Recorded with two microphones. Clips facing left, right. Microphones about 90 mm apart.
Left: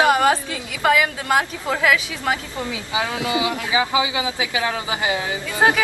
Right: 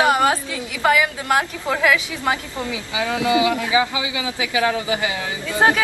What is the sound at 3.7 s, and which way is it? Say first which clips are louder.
Speech: even; 30° left (ahead or behind).